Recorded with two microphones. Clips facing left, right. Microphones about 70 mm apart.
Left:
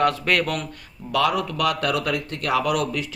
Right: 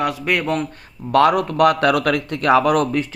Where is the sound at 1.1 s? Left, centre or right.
Right.